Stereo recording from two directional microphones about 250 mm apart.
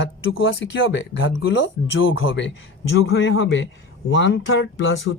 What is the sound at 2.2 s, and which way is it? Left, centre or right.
Speech, left.